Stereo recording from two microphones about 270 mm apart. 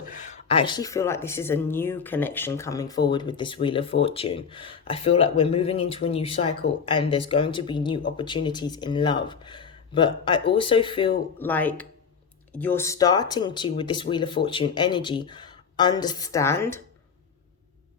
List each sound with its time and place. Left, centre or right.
0.1 s speech: left
11.3 s speech: centre